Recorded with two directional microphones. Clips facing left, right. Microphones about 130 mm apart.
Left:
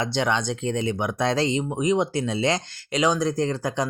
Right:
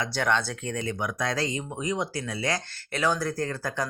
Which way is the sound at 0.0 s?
25° left (ahead or behind).